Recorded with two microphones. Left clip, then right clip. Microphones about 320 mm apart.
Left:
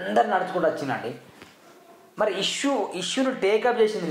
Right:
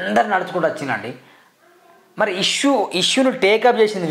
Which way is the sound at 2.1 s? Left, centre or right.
Right.